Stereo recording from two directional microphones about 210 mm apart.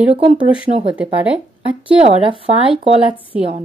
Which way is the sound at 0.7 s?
30° right (ahead or behind).